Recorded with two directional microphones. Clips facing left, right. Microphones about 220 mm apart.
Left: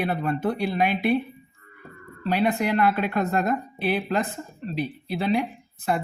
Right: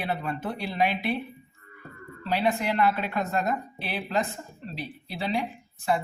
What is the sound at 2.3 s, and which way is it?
Speech, 50° left (ahead or behind).